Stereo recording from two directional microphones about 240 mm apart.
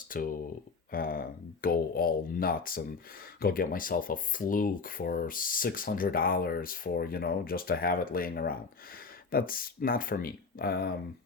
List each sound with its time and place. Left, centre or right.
0.1 s speech: left